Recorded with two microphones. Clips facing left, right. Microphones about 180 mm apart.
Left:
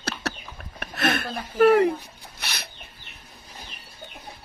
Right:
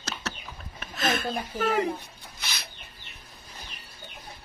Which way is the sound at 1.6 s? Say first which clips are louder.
Left 10 dB; 60° left (ahead or behind).